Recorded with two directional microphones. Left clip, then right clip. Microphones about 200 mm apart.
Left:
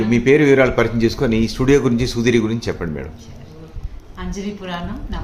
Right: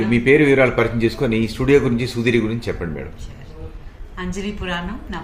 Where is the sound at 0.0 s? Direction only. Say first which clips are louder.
Left 1 dB; 5° left (ahead or behind).